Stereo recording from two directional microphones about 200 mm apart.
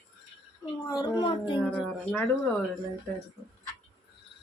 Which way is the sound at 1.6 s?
5° left (ahead or behind).